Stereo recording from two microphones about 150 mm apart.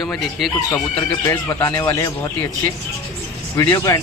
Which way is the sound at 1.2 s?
20° left (ahead or behind).